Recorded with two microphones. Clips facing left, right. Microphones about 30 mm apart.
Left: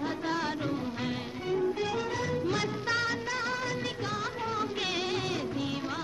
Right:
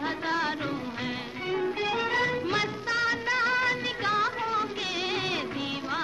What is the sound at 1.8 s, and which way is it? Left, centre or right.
Music, right.